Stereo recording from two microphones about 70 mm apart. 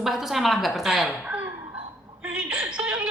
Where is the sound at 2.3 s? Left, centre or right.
Centre.